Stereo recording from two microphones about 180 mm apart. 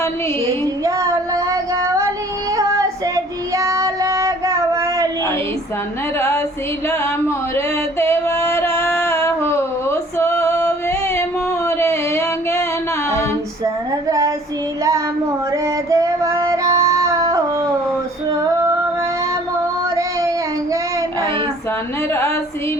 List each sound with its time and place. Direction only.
0.9 s child singing: 20° right (ahead or behind)
3.5 s child singing: 15° right (ahead or behind)
6.1 s music: 15° left (ahead or behind)
6.8 s a sound: 15° left (ahead or behind)
14.1 s child singing: 20° right (ahead or behind)
15.6 s female singing: 20° right (ahead or behind)